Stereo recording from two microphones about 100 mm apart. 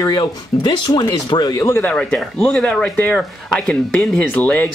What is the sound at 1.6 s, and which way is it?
Speech, 20° left (ahead or behind).